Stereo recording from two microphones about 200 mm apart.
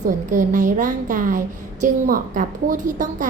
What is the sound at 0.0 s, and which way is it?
A woman's voice, 40° right (ahead or behind).